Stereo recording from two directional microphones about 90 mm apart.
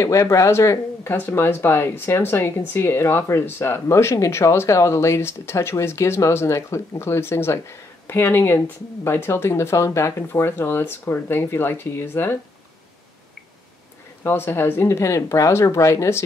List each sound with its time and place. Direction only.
0.0 s speech: 35° left (ahead or behind)
14.2 s speech: 25° left (ahead or behind)